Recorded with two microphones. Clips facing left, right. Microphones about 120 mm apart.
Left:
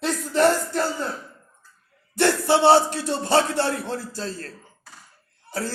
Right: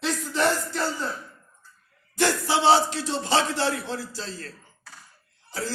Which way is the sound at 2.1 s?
60° left (ahead or behind).